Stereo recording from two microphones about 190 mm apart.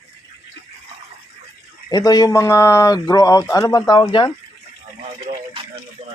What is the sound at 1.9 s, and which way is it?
Speech, 20° left (ahead or behind).